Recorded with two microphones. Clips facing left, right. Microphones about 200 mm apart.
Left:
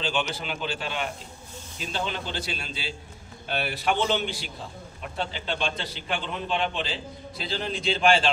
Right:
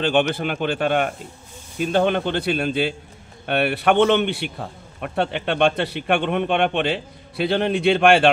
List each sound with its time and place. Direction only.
0.0 s a man's voice: 60° right (ahead or behind)